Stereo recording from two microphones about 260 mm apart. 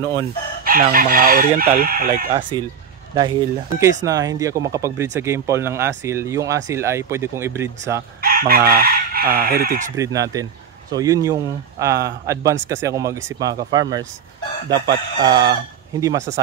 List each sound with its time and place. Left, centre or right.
0.0 s speech: centre
0.7 s chicken: right
2.5 s speech: centre
8.2 s chicken: right
9.9 s speech: centre